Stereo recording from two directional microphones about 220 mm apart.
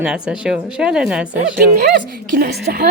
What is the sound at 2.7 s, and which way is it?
Speech, 40° right (ahead or behind).